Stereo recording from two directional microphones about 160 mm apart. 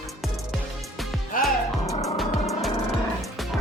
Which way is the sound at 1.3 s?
60° left (ahead or behind).